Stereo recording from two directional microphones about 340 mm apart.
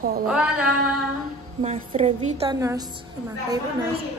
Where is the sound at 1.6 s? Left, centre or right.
Centre.